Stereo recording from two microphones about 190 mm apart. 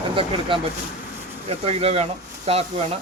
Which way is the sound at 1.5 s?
35° right (ahead or behind).